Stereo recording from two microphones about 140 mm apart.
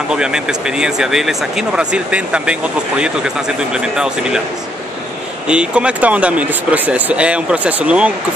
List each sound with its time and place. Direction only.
0.1 s speech: 5° right (ahead or behind)
5.5 s speech: 5° right (ahead or behind)